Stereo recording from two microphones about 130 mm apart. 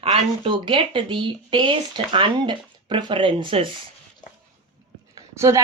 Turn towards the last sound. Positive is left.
turn(degrees=-25)  # may be behind; listen again after turning